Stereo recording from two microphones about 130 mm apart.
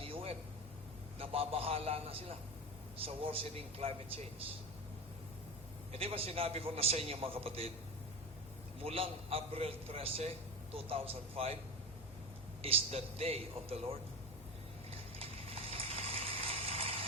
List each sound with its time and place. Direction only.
0.0 s a sound: 45° right (ahead or behind)
1.2 s a man's voice: 45° right (ahead or behind)
5.9 s a man's voice: 50° right (ahead or behind)
8.8 s a man's voice: 50° right (ahead or behind)
12.6 s a man's voice: 50° right (ahead or behind)
14.8 s a sound: 50° right (ahead or behind)